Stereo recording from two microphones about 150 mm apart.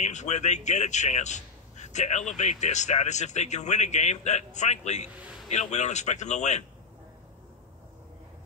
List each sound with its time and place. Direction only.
0.0 s a man's voice: 50° left (ahead or behind)